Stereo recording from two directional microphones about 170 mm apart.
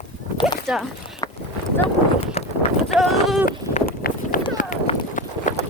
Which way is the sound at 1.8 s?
35° left (ahead or behind).